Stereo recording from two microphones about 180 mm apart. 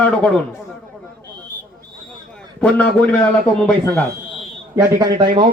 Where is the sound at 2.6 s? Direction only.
5° left (ahead or behind).